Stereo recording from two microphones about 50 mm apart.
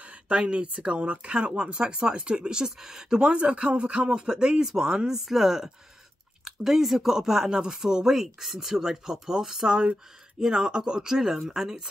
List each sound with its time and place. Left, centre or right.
0.0 s speech: right